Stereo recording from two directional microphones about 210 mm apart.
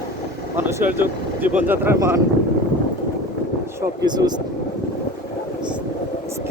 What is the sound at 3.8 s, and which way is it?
Speech, 20° right (ahead or behind).